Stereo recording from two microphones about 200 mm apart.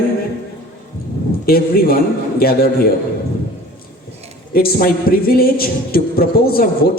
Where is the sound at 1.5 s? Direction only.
50° left (ahead or behind).